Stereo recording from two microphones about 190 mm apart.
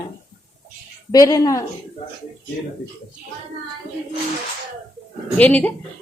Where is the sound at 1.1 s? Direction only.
20° left (ahead or behind).